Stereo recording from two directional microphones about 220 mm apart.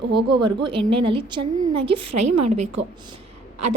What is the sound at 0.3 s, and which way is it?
A woman's voice, 20° right (ahead or behind).